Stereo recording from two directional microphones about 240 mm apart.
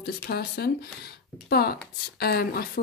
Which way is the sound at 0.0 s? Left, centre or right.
Left.